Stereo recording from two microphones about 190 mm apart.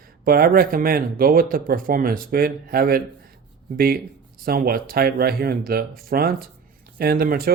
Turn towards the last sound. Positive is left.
turn(degrees=-50)  # may be behind; listen again after turning